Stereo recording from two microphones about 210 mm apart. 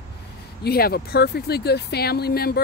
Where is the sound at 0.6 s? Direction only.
45° left (ahead or behind).